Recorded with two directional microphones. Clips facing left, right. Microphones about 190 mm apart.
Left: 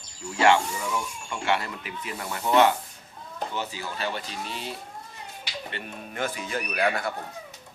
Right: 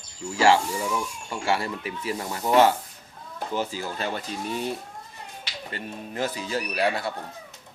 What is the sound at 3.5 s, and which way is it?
Speech, 35° right (ahead or behind).